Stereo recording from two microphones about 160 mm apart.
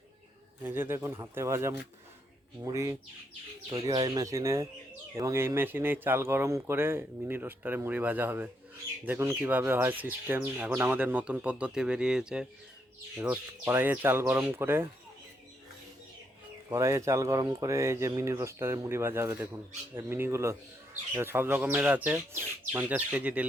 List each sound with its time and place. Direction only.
0.6 s speech: 15° right (ahead or behind)
16.6 s speech: 20° right (ahead or behind)